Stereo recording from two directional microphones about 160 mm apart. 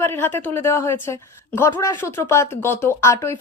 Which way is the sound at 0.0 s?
15° left (ahead or behind).